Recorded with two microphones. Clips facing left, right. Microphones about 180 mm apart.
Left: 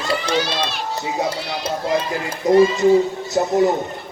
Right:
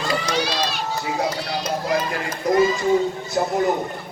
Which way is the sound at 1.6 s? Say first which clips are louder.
Left 2 dB; 30° left (ahead or behind).